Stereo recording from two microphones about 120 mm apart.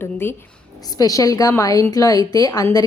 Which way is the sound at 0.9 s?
30° left (ahead or behind).